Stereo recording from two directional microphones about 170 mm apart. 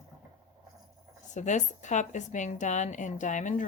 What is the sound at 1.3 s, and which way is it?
A woman's voice, 45° left (ahead or behind).